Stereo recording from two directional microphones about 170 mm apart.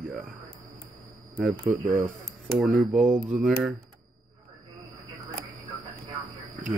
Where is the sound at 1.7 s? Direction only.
5° right (ahead or behind).